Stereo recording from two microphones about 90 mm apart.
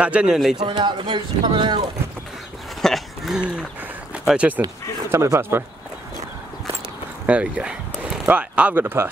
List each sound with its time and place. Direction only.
0.0 s a man's voice: 10° right (ahead or behind)
0.6 s speech: 60° right (ahead or behind)
2.8 s a sound: centre (ahead or behind)
3.3 s a man's voice: 10° right (ahead or behind)
5.1 s speech: 30° right (ahead or behind)
7.2 s speech: 15° right (ahead or behind)